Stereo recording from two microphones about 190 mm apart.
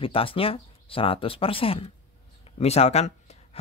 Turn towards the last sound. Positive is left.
turn(degrees=35)  # may be behind; listen again after turning